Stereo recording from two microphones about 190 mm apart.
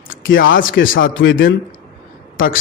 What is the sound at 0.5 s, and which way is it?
Speech, 45° left (ahead or behind).